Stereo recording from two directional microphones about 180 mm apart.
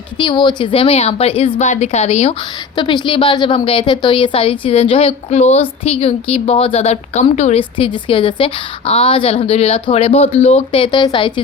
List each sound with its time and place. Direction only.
0.2 s a woman's voice: 25° left (ahead or behind)
2.7 s a woman's voice: 25° left (ahead or behind)